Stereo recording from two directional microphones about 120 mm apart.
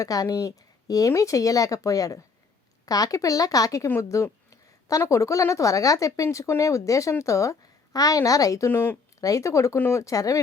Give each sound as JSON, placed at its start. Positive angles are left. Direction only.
{"t": 0.0, "sound": "speech", "side_deg": 30}
{"t": 9.2, "sound": "speech", "side_deg": 25}